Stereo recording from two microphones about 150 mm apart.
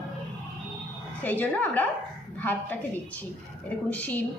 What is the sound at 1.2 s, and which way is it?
A woman's voice, 10° left (ahead or behind).